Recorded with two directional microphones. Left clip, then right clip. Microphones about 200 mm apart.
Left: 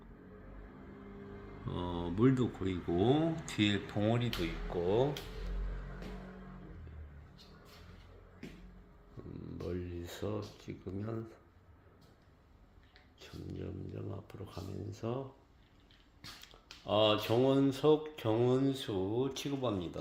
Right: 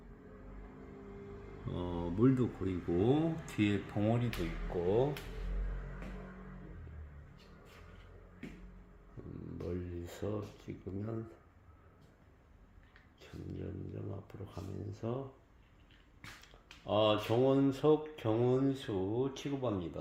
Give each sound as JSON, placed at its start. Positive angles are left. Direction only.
{"t": 1.7, "sound": "speech", "side_deg": 0}
{"t": 9.6, "sound": "a sound", "side_deg": -5}
{"t": 13.1, "sound": "speech", "side_deg": -5}
{"t": 16.8, "sound": "speech", "side_deg": 0}